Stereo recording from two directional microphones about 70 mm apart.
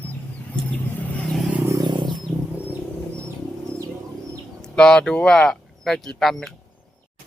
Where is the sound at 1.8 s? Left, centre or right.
Right.